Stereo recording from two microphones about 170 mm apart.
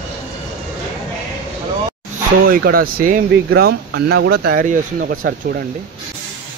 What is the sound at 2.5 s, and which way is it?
Speech, 60° right (ahead or behind).